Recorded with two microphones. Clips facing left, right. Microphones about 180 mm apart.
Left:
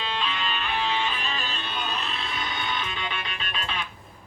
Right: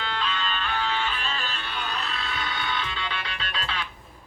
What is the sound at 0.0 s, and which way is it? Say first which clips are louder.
Music: even; 15° left (ahead or behind).